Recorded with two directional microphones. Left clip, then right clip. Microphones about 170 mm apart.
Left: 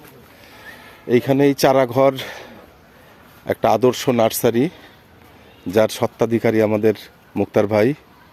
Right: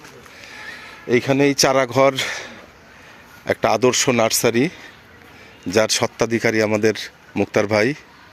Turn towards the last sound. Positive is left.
turn(degrees=15)  # may be behind; listen again after turning